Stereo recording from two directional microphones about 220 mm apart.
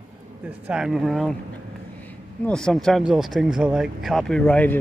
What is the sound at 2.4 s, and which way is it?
Speech, 5° left (ahead or behind).